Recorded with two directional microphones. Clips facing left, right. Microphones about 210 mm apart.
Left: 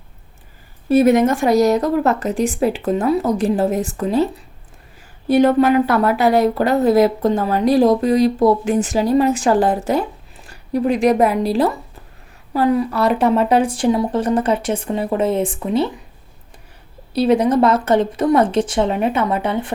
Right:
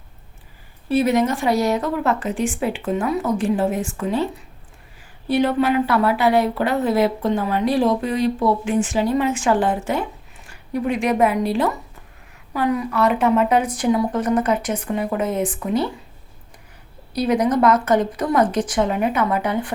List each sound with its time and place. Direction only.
0.9 s a woman's voice: 45° left (ahead or behind)
5.3 s a woman's voice: 45° left (ahead or behind); by 15.9 s 25° left (ahead or behind)
17.2 s speech: 30° left (ahead or behind)